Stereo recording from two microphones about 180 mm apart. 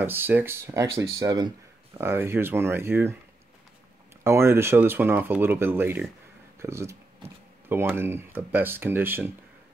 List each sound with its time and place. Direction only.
0.0 s speech: 10° right (ahead or behind)
4.2 s speech: 15° right (ahead or behind)